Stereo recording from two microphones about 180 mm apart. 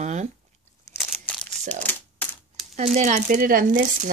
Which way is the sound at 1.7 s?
10° left (ahead or behind).